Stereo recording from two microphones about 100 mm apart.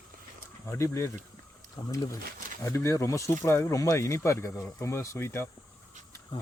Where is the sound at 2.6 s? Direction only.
30° left (ahead or behind).